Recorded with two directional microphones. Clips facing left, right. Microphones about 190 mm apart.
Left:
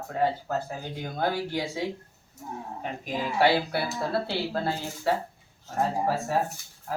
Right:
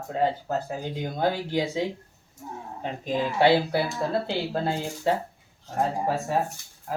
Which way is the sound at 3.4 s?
20° right (ahead or behind).